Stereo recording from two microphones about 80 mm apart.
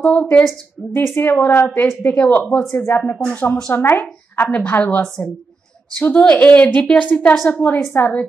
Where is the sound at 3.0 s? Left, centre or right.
Left.